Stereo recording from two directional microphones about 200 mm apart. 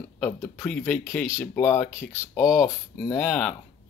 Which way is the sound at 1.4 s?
10° left (ahead or behind).